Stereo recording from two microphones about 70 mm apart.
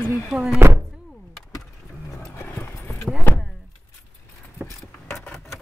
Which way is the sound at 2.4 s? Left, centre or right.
Left.